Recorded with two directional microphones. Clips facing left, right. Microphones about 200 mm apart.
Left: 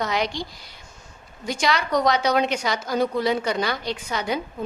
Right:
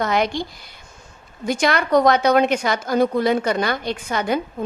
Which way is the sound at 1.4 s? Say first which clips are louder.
Right 4 dB; 55° right (ahead or behind).